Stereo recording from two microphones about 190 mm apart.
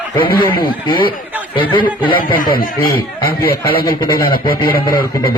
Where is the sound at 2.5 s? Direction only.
50° left (ahead or behind).